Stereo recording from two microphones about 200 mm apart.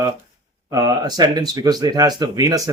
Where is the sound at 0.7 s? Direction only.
15° right (ahead or behind).